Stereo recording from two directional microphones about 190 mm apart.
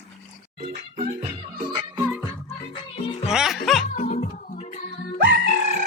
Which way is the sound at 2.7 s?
30° left (ahead or behind).